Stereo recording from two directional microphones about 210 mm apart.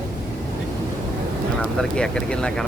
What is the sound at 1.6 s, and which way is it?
Speech, 5° left (ahead or behind).